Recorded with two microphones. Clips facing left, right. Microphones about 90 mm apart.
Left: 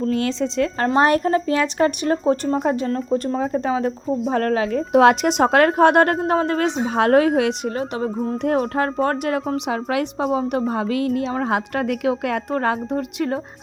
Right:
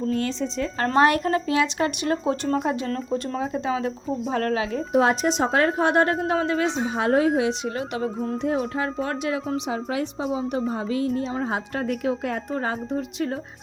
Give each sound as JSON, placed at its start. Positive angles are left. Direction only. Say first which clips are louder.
{"t": 0.1, "sound": "a woman's voice", "louder": "left 4 dB", "side_deg": 90}
{"t": 0.9, "sound": "speech", "louder": "left 2 dB", "side_deg": 35}
{"t": 4.9, "sound": "speech", "louder": "left 6 dB", "side_deg": 90}
{"t": 6.2, "sound": "a woman's voice", "louder": "left 3 dB", "side_deg": 45}
{"t": 6.9, "sound": "speech", "louder": "left 6 dB", "side_deg": 65}
{"t": 7.8, "sound": "speech", "louder": "left 3 dB", "side_deg": 35}
{"t": 8.5, "sound": "a woman's voice", "louder": "left 5 dB", "side_deg": 50}